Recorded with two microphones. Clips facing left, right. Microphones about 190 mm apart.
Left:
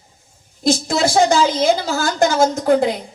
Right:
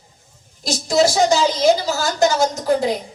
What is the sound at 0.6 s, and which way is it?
A woman's voice, 55° left (ahead or behind).